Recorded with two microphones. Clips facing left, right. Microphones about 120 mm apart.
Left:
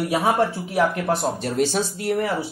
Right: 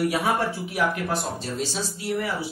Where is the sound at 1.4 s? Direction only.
60° left (ahead or behind).